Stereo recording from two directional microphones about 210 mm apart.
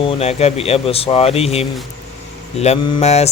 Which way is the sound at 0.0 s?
30° left (ahead or behind).